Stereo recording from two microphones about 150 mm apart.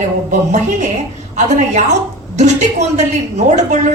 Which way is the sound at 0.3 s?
55° right (ahead or behind).